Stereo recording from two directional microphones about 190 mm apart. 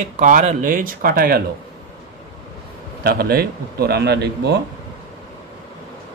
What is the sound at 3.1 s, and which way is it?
A man's voice, 55° right (ahead or behind).